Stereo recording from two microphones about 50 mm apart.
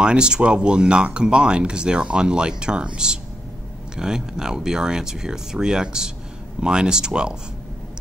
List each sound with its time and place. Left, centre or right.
0.0 s speech: centre